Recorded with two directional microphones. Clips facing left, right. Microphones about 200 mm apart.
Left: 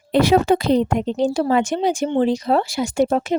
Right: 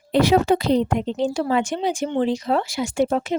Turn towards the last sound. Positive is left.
turn(degrees=40)  # may be behind; listen again after turning